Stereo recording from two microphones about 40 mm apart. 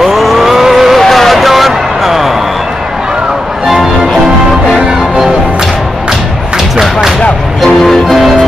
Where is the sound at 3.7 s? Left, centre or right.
Centre.